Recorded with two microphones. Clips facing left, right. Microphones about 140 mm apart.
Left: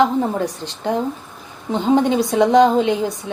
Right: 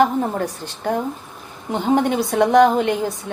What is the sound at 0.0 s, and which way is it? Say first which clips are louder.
A woman's voice: left 1 dB; 15° left (ahead or behind).